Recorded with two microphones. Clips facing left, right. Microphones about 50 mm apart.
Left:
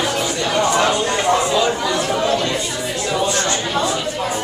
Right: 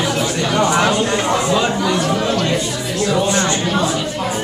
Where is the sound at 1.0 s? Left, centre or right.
Centre.